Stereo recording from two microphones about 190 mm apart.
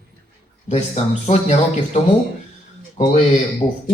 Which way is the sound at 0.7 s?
35° left (ahead or behind).